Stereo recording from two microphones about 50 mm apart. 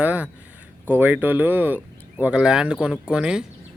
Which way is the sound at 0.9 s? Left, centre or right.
Right.